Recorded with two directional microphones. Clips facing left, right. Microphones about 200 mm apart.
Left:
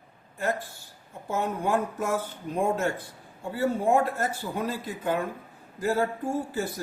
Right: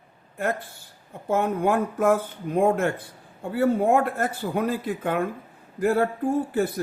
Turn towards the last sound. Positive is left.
turn(degrees=-60)  # may be behind; listen again after turning